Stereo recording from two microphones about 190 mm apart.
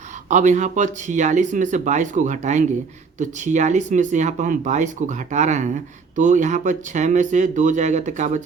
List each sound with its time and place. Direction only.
0.3 s speech: 40° right (ahead or behind)